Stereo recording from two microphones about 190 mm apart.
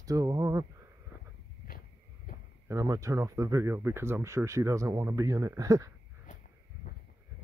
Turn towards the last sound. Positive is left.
turn(degrees=-20)  # may be behind; listen again after turning